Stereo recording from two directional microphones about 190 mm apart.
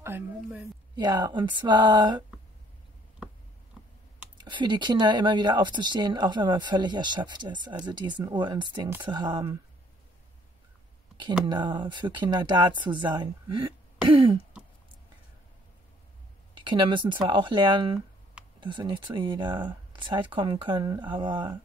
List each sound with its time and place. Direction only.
0.0 s a woman's voice: 10° right (ahead or behind)
0.9 s speech: 25° right (ahead or behind)
4.4 s speech: 25° right (ahead or behind)
11.4 s speech: 25° right (ahead or behind)
16.6 s speech: 25° right (ahead or behind)